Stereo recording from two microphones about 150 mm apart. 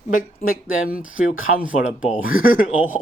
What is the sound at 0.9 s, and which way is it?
Speech, 10° right (ahead or behind).